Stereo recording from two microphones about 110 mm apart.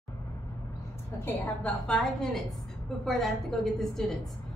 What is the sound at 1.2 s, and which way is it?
A woman's voice, 15° left (ahead or behind).